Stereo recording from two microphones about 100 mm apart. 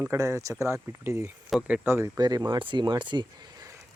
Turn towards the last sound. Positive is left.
turn(degrees=-45)  # may be behind; listen again after turning